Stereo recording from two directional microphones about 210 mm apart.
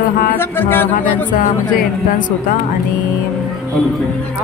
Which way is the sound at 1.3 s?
40° left (ahead or behind).